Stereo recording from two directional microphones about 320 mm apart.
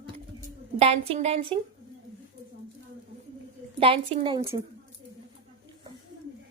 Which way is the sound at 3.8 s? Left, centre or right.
Centre.